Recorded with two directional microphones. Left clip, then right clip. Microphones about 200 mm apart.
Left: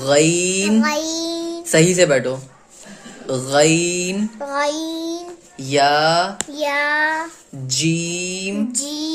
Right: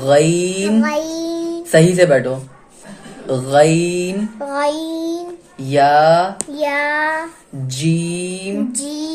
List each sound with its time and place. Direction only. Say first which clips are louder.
0.0 s child singing: right 3 dB; 25° left (ahead or behind)